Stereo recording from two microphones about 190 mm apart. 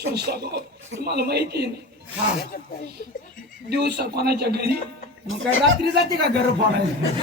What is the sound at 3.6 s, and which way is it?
Speech, 60° right (ahead or behind).